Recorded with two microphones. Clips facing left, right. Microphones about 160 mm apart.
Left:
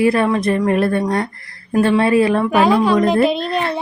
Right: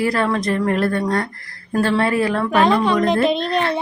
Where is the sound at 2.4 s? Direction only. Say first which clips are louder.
Left 2 dB; 5° left (ahead or behind).